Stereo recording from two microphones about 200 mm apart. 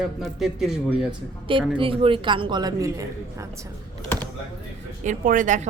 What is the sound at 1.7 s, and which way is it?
A woman's voice, 25° right (ahead or behind).